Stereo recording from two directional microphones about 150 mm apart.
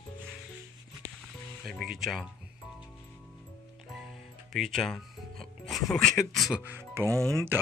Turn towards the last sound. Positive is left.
turn(degrees=-20)  # may be behind; listen again after turning